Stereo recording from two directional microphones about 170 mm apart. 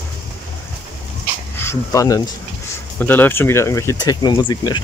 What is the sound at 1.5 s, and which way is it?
Speech, 15° left (ahead or behind).